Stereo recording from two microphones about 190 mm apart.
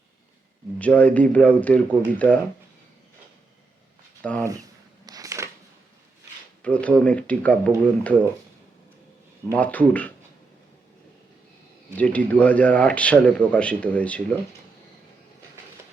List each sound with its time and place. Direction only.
0.8 s a man's voice: 5° left (ahead or behind)
4.2 s speech: 5° left (ahead or behind)
5.0 s a sound: 20° right (ahead or behind)
6.6 s a man's voice: 5° left (ahead or behind)
9.5 s a man's voice: 10° left (ahead or behind)
11.9 s a man's voice: 10° left (ahead or behind)